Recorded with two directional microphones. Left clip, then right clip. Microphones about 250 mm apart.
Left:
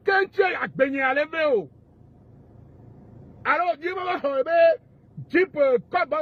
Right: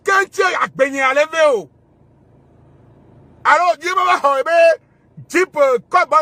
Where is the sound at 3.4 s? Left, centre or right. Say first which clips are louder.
Right 10 dB; right.